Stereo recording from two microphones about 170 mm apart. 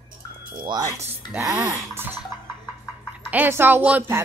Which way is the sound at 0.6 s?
20° right (ahead or behind).